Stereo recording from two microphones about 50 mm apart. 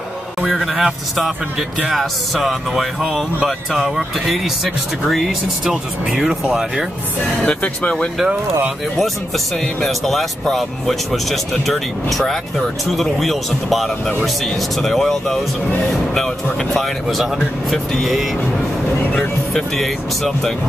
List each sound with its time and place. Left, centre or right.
0.6 s a man's voice: centre
7.4 s speech: left
9.8 s speech: centre
16.5 s speech: centre
19.5 s speech: centre